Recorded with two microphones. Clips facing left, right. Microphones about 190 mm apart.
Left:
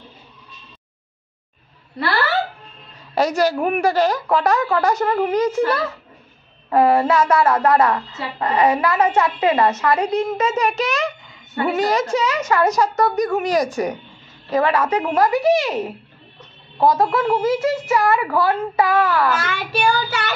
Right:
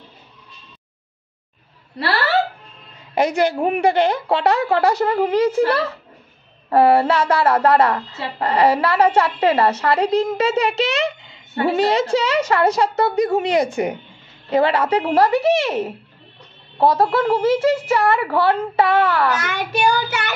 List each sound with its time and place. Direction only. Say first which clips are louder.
3.2 s a woman's voice: even; 25° right (ahead or behind)
19.4 s a woman's voice: right 1 dB; 20° right (ahead or behind)